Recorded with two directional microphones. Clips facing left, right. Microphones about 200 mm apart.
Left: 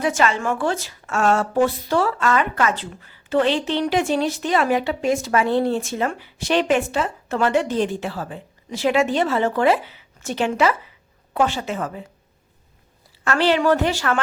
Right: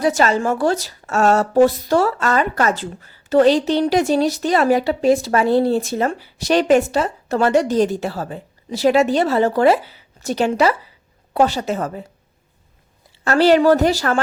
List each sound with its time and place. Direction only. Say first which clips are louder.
0.0 s a woman's voice: right 4 dB; 35° right (ahead or behind)
13.2 s a woman's voice: right 5 dB; 40° right (ahead or behind)